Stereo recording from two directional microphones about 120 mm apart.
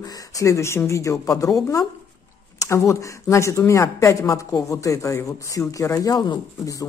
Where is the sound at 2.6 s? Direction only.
25° left (ahead or behind).